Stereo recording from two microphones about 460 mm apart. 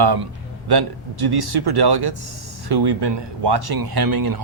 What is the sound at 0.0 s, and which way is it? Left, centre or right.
Speech, right.